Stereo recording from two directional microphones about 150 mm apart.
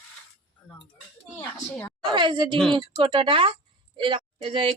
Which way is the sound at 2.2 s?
35° right (ahead or behind).